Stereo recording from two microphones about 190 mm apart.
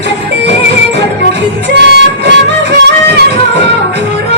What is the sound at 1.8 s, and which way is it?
Music, 65° right (ahead or behind).